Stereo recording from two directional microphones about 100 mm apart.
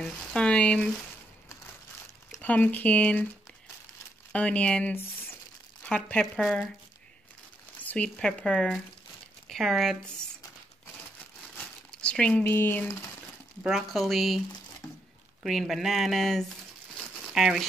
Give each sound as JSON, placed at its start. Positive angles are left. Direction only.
{"t": 0.0, "sound": "speech", "side_deg": 10}
{"t": 2.4, "sound": "speech", "side_deg": 15}
{"t": 4.3, "sound": "speech", "side_deg": 10}
{"t": 7.8, "sound": "speech", "side_deg": 10}
{"t": 11.5, "sound": "crumpling", "side_deg": 10}
{"t": 13.7, "sound": "speech", "side_deg": 0}
{"t": 15.4, "sound": "speech", "side_deg": -5}